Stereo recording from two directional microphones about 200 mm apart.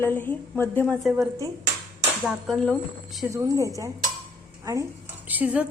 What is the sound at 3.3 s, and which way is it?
Speech, 15° right (ahead or behind).